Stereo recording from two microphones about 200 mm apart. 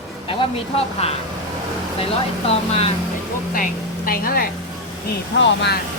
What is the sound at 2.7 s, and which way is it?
Speech, 30° left (ahead or behind).